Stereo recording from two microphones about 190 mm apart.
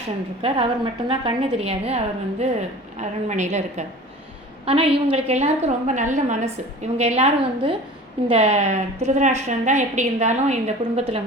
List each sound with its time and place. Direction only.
0.4 s a woman's voice: 30° right (ahead or behind)